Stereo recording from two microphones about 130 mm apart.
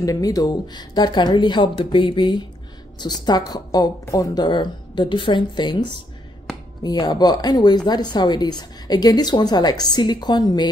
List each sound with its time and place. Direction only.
0.0 s a woman's voice: 25° left (ahead or behind)